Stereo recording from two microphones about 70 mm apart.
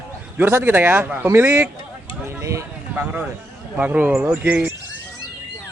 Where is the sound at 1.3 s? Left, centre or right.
Right.